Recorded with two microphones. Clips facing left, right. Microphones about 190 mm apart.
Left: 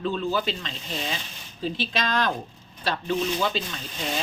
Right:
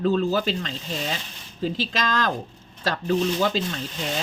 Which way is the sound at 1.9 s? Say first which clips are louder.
Right 1 dB; 45° right (ahead or behind).